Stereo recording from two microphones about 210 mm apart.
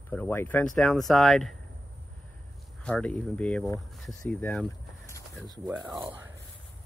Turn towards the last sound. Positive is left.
turn(degrees=-5)  # may be behind; listen again after turning